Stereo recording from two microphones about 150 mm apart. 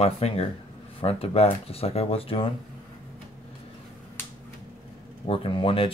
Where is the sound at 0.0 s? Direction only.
45° left (ahead or behind).